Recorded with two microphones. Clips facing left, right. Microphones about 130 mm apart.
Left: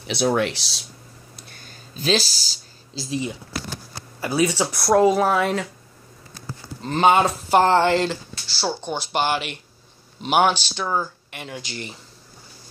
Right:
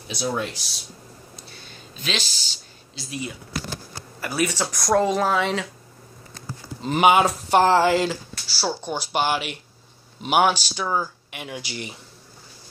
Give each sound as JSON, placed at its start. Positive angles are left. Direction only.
{"t": 0.0, "sound": "speech", "side_deg": 70}
{"t": 1.5, "sound": "a sound", "side_deg": 45}
{"t": 4.2, "sound": "speech", "side_deg": 20}
{"t": 6.8, "sound": "speech", "side_deg": -15}